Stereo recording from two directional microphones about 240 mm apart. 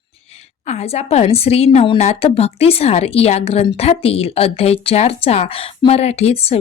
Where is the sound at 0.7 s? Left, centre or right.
Left.